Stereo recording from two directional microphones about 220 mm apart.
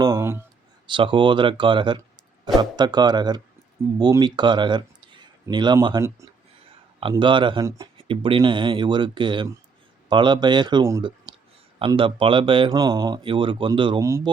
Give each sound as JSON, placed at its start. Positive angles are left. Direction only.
{"t": 0.0, "sound": "speech", "side_deg": -15}
{"t": 0.9, "sound": "speech", "side_deg": -20}